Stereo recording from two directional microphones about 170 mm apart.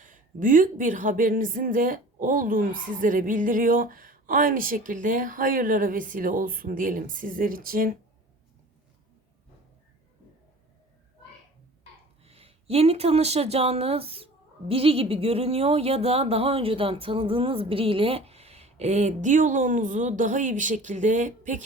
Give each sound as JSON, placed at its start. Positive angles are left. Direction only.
{"t": 0.0, "sound": "speech", "side_deg": -50}
{"t": 12.2, "sound": "speech", "side_deg": -35}